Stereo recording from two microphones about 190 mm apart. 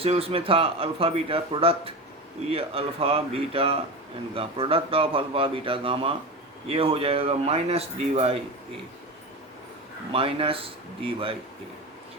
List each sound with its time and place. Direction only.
0.0 s speech: 30° right (ahead or behind)
10.1 s speech: 30° right (ahead or behind)